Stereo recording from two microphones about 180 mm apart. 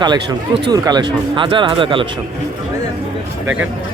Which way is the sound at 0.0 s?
25° right (ahead or behind).